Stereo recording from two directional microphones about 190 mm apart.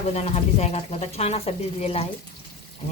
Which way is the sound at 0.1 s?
35° left (ahead or behind).